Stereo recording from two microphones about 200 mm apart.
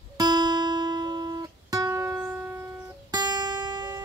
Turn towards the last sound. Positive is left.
turn(degrees=-20)  # may be behind; listen again after turning